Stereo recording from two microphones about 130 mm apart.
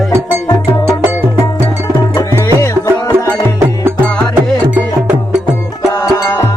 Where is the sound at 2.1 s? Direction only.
20° left (ahead or behind).